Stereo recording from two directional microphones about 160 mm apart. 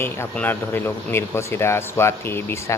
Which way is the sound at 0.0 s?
15° left (ahead or behind).